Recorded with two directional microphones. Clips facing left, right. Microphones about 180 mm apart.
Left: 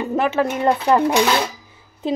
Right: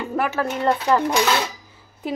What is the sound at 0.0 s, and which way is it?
A woman's voice, 20° left (ahead or behind).